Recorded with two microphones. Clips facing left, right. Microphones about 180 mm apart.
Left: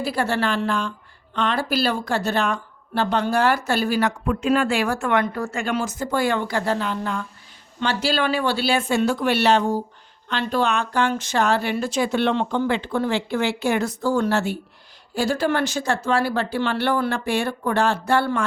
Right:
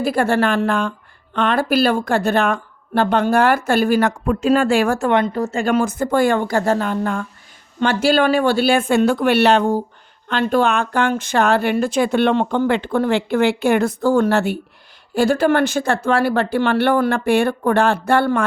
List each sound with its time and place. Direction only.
0.0 s speech: 50° right (ahead or behind)
5.0 s speech: 25° right (ahead or behind)
5.6 s speech: 50° right (ahead or behind)